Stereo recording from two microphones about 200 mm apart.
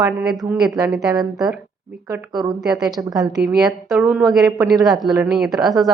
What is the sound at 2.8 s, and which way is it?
Speech, 20° right (ahead or behind).